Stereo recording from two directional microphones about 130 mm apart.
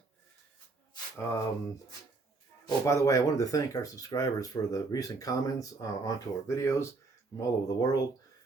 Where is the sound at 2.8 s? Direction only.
25° left (ahead or behind).